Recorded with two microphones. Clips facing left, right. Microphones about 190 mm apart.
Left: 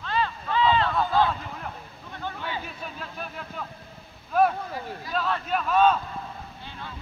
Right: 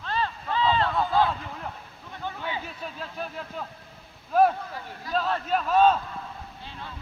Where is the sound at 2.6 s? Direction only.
30° right (ahead or behind).